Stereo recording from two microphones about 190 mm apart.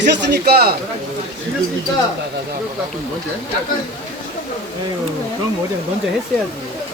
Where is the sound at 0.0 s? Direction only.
60° right (ahead or behind).